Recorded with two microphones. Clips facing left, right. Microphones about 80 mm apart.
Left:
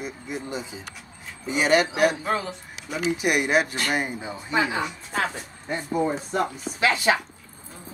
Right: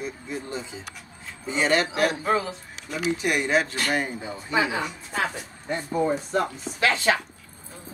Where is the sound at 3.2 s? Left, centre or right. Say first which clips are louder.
Left 2 dB; centre.